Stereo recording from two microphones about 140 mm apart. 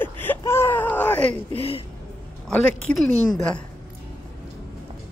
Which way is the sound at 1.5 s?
40° left (ahead or behind).